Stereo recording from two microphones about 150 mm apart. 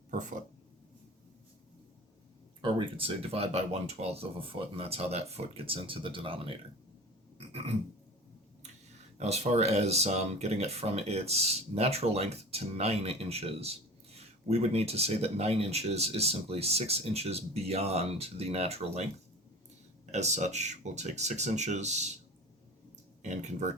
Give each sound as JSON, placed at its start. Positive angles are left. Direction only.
{"t": 0.1, "sound": "a sound", "side_deg": -60}
{"t": 2.6, "sound": "speech", "side_deg": -35}
{"t": 7.3, "sound": "a sound", "side_deg": -45}
{"t": 9.1, "sound": "speech", "side_deg": -45}
{"t": 20.1, "sound": "speech", "side_deg": -50}
{"t": 23.2, "sound": "speech", "side_deg": -50}